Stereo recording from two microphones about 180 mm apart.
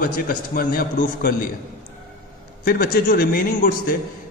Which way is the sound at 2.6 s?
55° left (ahead or behind).